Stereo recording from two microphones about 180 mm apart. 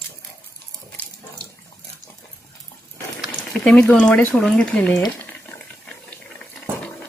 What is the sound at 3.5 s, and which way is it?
Speech, 5° left (ahead or behind).